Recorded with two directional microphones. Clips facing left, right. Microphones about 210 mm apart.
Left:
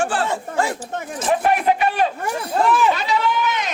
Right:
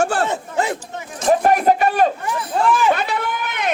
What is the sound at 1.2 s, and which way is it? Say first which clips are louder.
Speech: right 4 dB; 40° right (ahead or behind).